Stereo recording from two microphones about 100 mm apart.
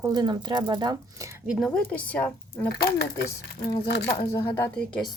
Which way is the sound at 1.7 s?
15° left (ahead or behind).